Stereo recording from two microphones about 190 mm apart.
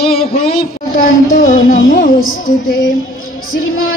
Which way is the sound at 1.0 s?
50° left (ahead or behind).